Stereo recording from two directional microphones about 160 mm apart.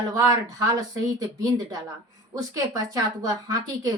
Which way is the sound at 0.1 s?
20° right (ahead or behind).